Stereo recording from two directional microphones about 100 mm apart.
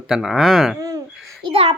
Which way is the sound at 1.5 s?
75° right (ahead or behind).